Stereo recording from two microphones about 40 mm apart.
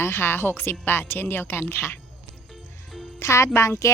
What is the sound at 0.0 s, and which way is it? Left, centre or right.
Speech, left.